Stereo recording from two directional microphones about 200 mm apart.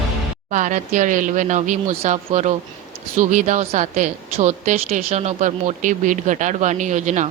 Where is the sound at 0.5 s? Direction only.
40° right (ahead or behind).